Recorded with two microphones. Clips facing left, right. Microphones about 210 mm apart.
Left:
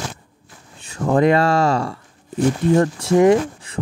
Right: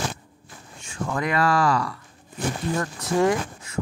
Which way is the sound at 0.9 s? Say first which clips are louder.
Left 11 dB; 35° left (ahead or behind).